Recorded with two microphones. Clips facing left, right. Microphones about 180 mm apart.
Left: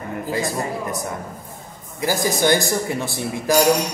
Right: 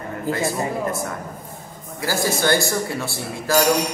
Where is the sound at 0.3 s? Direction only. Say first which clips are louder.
Right 2 dB; 15° left (ahead or behind).